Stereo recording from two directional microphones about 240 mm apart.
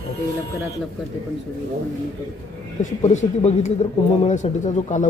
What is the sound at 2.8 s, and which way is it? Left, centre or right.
A man's voice, left.